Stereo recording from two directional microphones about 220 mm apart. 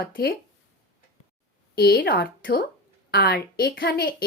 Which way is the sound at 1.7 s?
45° left (ahead or behind).